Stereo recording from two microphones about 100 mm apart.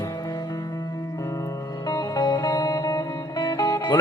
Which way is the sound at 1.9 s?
35° left (ahead or behind).